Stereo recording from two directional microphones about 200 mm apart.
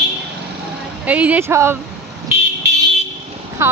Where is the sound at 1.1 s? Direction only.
5° right (ahead or behind).